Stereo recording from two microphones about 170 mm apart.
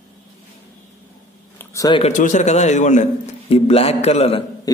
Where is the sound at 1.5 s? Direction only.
20° left (ahead or behind).